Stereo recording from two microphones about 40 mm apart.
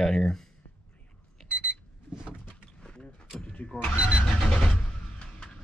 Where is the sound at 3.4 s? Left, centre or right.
Left.